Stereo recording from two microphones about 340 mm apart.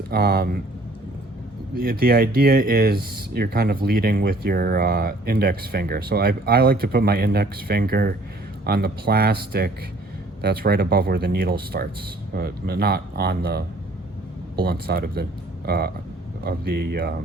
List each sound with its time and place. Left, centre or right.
0.1 s speech: right
1.8 s speech: right